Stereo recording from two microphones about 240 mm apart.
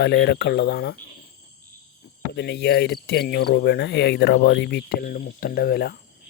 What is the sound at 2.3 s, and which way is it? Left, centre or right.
Cricket, left.